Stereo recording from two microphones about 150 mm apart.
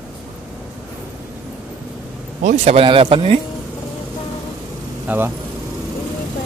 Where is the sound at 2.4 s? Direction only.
55° right (ahead or behind).